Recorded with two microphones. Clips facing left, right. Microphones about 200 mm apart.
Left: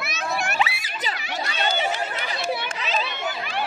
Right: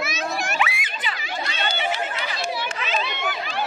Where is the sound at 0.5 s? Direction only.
35° left (ahead or behind).